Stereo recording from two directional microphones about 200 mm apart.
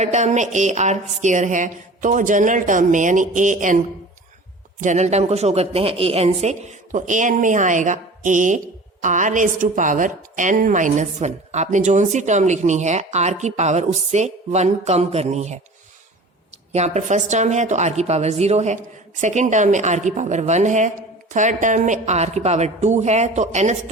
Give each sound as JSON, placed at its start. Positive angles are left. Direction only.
{"t": 0.0, "sound": "speech", "side_deg": -35}
{"t": 4.8, "sound": "speech", "side_deg": -35}
{"t": 16.7, "sound": "speech", "side_deg": -35}